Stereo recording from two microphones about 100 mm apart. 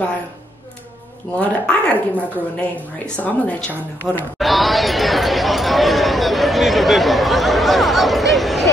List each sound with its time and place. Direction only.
1.4 s speech: 15° left (ahead or behind)
4.4 s chatter: centre (ahead or behind)